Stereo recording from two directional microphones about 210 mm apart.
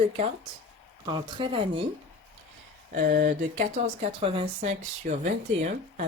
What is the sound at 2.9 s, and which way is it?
Speech, 35° right (ahead or behind).